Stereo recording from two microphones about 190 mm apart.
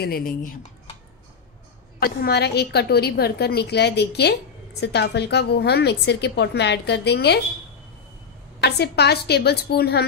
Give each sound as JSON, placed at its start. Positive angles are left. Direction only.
{"t": 0.0, "sound": "speech", "side_deg": 50}
{"t": 2.0, "sound": "a woman's voice", "side_deg": 55}
{"t": 8.6, "sound": "a woman's voice", "side_deg": 60}